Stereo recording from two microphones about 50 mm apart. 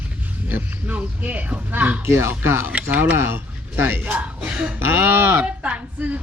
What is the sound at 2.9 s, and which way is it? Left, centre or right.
Speech, right.